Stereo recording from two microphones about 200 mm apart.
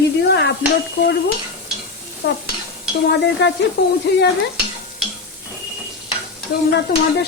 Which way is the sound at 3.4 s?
60° left (ahead or behind).